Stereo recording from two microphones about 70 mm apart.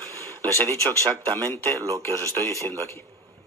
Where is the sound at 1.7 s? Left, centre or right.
Right.